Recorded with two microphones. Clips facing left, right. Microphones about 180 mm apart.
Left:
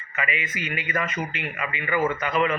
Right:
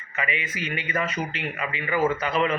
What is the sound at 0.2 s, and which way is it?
A man's voice, 30° right (ahead or behind).